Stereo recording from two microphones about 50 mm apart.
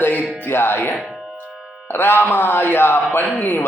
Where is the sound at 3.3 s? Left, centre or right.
Left.